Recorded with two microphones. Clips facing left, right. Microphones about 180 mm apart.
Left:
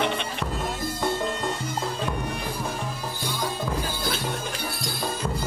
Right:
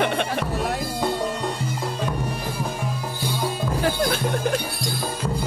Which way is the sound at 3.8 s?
75° right (ahead or behind).